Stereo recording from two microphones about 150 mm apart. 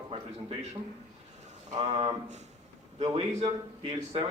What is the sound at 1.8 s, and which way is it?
A man's voice, 50° right (ahead or behind).